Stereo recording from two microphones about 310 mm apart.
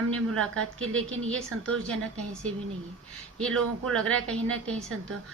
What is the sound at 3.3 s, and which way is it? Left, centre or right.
Speech, centre.